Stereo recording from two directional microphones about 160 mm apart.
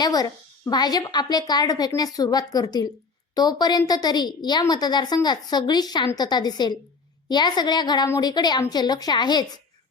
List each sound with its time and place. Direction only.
0.0 s a woman's voice: 25° left (ahead or behind)